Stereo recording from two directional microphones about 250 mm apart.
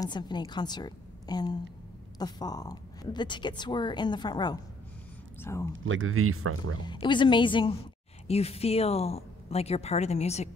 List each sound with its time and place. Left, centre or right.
0.0 s speech: centre
5.9 s speech: right
6.8 s speech: centre